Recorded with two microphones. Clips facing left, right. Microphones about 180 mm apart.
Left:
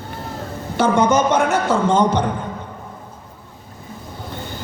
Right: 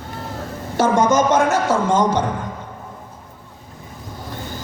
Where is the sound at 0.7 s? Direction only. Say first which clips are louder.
Even; 60° left (ahead or behind).